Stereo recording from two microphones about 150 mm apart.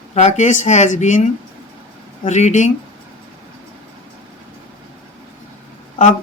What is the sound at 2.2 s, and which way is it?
Speech, 50° left (ahead or behind).